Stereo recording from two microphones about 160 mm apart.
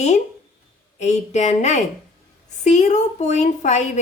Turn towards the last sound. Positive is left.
turn(degrees=45)  # may be behind; listen again after turning